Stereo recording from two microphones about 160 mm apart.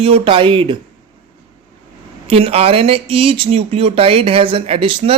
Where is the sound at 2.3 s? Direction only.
40° right (ahead or behind).